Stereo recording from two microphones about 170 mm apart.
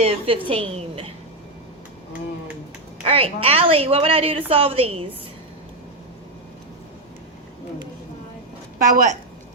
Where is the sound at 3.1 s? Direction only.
35° right (ahead or behind).